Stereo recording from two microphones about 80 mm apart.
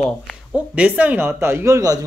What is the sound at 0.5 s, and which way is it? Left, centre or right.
A man's voice, centre.